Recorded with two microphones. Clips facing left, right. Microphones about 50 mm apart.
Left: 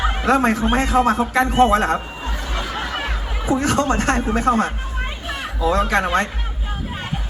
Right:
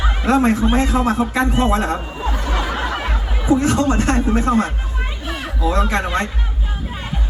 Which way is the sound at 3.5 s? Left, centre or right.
Left.